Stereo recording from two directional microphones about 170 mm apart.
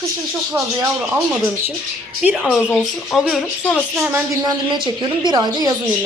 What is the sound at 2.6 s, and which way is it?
Speech, 10° left (ahead or behind).